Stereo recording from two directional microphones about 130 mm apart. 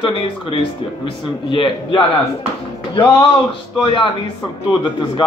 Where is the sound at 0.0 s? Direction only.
40° left (ahead or behind).